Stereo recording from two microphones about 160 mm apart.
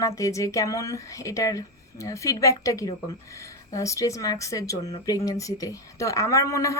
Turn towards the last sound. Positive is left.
turn(degrees=20)  # may be behind; listen again after turning